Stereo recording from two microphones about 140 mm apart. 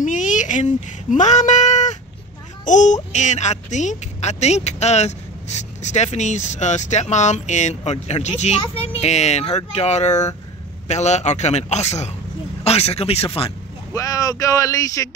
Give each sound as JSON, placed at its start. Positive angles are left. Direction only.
{"t": 0.0, "sound": "a sound", "side_deg": 65}
{"t": 2.6, "sound": "a man's voice", "side_deg": 60}
{"t": 13.9, "sound": "speech", "side_deg": 25}